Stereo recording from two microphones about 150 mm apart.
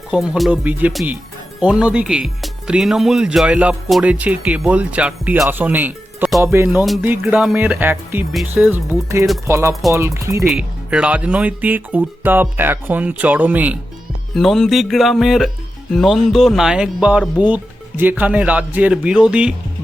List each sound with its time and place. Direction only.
0.1 s speech: 5° right (ahead or behind); by 10.4 s 20° right (ahead or behind)
10.4 s speech: 5° right (ahead or behind)
14.3 s music: centre (ahead or behind)
15.9 s speech: centre (ahead or behind)